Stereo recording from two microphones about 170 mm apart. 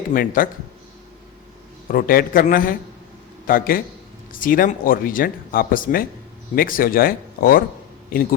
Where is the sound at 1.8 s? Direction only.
55° left (ahead or behind).